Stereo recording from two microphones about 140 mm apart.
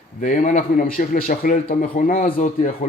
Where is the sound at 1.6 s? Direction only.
60° left (ahead or behind).